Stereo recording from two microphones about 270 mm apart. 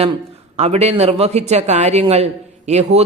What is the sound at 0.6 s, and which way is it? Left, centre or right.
A man's voice, right.